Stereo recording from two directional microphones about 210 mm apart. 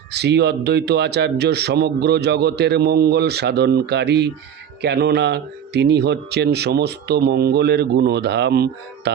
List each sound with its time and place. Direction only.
0.1 s a man's voice: 50° right (ahead or behind)